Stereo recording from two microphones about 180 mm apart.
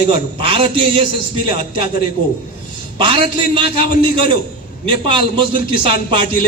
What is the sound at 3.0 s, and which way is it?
A man's voice, 30° right (ahead or behind).